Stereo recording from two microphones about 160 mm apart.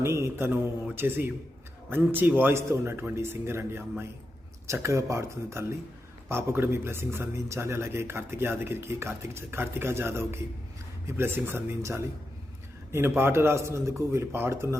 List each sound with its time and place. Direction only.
0.0 s speech: 15° right (ahead or behind)